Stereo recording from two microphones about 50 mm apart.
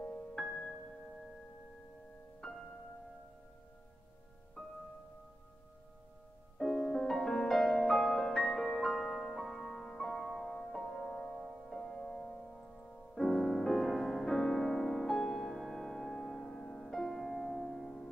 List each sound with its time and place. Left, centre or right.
0.0 s music: centre
2.4 s music: centre
4.6 s music: centre
6.6 s music: centre